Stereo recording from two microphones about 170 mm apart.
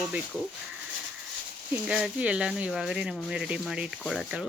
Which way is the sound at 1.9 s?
5° right (ahead or behind).